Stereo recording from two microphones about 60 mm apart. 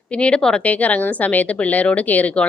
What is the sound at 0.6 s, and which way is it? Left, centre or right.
A woman's voice, left.